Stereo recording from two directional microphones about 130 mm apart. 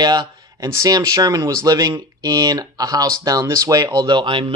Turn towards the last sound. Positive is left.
turn(degrees=-40)  # may be behind; listen again after turning